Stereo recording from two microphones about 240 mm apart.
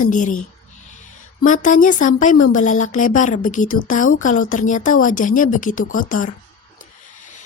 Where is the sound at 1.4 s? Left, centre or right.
Left.